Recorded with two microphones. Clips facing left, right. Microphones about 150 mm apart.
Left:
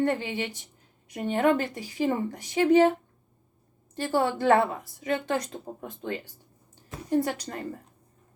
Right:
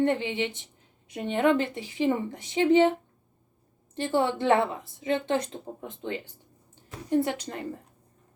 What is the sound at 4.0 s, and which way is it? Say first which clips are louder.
A woman's voice: even; 20° right (ahead or behind).